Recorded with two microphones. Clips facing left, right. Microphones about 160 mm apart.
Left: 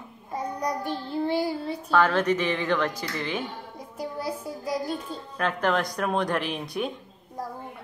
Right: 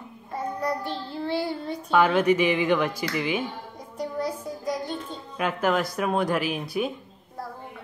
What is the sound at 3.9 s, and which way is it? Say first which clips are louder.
Music: right 3 dB; 5° left (ahead or behind).